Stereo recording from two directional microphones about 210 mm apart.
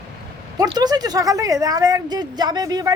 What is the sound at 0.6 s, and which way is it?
Speech, 20° right (ahead or behind).